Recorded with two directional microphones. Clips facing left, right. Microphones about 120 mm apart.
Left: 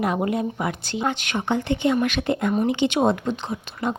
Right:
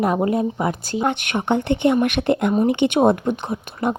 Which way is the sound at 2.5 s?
35° right (ahead or behind).